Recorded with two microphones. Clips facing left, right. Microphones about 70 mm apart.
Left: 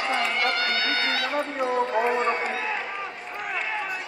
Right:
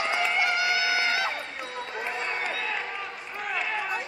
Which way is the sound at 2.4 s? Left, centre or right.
Left.